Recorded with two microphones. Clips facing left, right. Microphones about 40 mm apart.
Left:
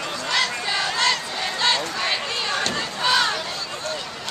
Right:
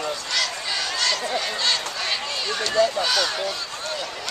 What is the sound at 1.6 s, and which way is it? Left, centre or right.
Run, centre.